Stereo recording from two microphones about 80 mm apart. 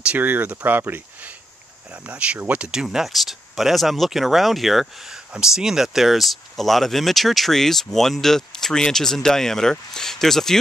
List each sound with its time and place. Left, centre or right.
0.0 s speech: right; by 10.6 s centre